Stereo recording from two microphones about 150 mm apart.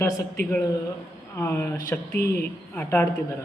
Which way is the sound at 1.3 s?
20° left (ahead or behind).